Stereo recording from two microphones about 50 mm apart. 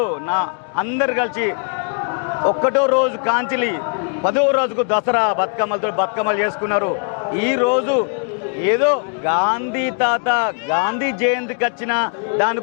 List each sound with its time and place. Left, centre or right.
0.0 s speech: left
2.0 s a sound: left
2.9 s speech: left